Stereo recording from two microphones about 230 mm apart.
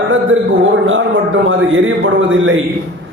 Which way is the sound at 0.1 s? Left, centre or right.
Right.